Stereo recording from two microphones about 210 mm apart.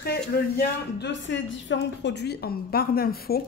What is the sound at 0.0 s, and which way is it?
A woman's voice, 50° left (ahead or behind).